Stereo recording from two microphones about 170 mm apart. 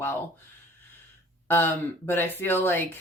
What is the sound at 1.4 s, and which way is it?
Speech, 15° left (ahead or behind).